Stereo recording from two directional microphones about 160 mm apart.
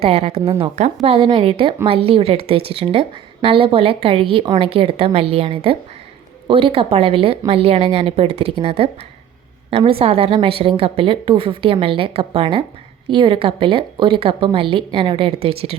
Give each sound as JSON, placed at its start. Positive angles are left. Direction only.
{"t": 0.0, "sound": "a woman's voice", "side_deg": -35}